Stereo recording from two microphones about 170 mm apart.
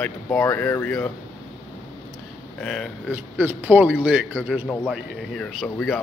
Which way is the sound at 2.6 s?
5° left (ahead or behind).